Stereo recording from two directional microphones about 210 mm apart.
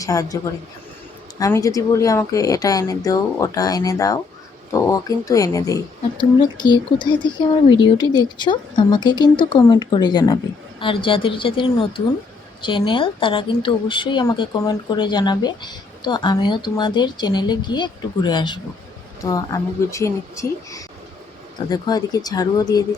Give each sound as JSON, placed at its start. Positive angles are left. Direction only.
{"t": 0.0, "sound": "a woman's voice", "side_deg": 15}
{"t": 1.4, "sound": "a woman's voice", "side_deg": 15}